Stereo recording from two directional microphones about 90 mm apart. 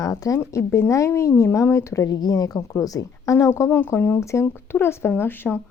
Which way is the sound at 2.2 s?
45° left (ahead or behind).